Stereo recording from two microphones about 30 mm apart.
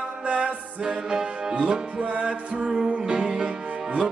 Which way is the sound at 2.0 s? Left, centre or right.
Right.